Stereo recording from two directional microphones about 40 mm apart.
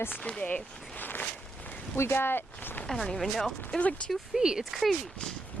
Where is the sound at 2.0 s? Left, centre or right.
Left.